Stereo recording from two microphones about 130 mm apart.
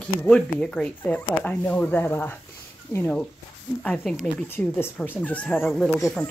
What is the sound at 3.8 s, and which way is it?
Speech, 5° left (ahead or behind).